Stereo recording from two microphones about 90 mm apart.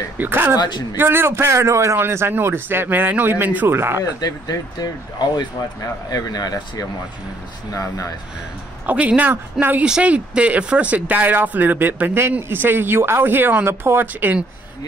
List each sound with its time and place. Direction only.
0.2 s speech: 25° right (ahead or behind)
0.6 s speech: 55° left (ahead or behind)
0.9 s speech: 25° right (ahead or behind)
4.2 s speech: 50° left (ahead or behind)
8.8 s speech: 15° right (ahead or behind)
9.8 s speech: 10° right (ahead or behind)